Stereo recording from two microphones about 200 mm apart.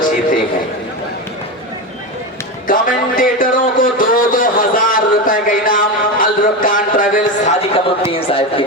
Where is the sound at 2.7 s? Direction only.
45° left (ahead or behind).